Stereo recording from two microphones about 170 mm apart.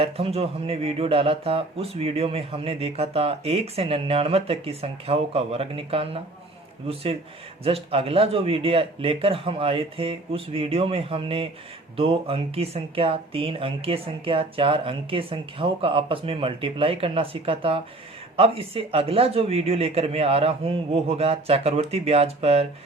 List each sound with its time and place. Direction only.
0.0 s speech: 35° right (ahead or behind)